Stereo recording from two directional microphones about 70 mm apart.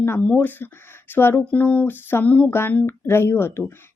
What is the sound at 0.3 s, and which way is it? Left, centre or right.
Speech, left.